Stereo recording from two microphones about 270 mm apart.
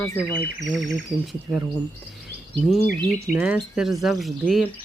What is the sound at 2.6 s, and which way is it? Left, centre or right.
Speech, centre.